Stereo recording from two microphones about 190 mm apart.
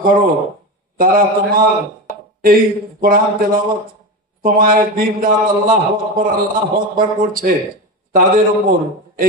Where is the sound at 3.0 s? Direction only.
50° right (ahead or behind).